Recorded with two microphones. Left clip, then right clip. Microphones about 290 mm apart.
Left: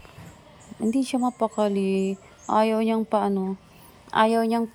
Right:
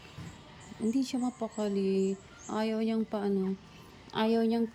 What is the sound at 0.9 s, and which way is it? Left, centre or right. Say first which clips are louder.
A woman's voice: left 8 dB; centre.